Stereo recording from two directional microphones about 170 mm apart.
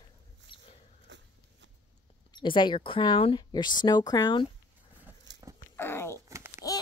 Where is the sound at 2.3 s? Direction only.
30° left (ahead or behind).